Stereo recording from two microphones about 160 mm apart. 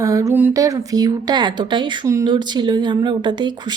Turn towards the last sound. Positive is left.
turn(degrees=-30)  # may be behind; listen again after turning